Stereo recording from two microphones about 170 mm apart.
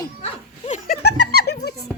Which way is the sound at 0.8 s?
75° left (ahead or behind).